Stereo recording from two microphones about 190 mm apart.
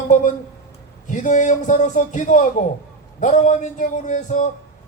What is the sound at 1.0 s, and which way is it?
A man's voice, 40° left (ahead or behind).